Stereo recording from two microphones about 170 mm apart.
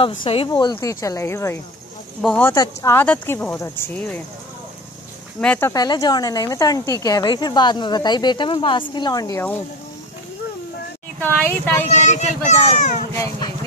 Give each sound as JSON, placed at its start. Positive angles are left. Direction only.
{"t": 0.2, "sound": "speech", "side_deg": 35}
{"t": 2.5, "sound": "speech", "side_deg": 20}
{"t": 5.4, "sound": "speech", "side_deg": 10}
{"t": 5.7, "sound": "speech", "side_deg": 20}
{"t": 11.1, "sound": "speech", "side_deg": 10}
{"t": 12.0, "sound": "a child's voice", "side_deg": 45}